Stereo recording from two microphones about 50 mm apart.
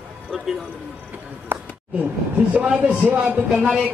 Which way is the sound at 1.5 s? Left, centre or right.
Right.